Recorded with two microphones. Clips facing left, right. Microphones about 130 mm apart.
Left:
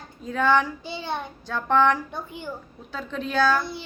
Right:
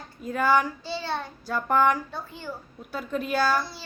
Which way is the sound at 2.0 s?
20° left (ahead or behind).